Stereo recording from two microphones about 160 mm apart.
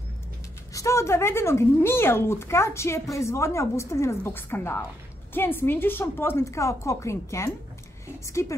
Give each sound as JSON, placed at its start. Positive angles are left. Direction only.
{"t": 0.7, "sound": "a woman's voice", "side_deg": 20}